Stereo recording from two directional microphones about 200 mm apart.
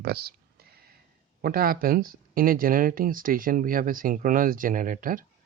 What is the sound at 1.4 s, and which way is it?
Speech, 50° right (ahead or behind).